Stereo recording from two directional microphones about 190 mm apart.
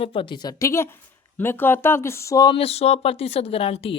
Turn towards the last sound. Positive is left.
turn(degrees=30)  # may be behind; listen again after turning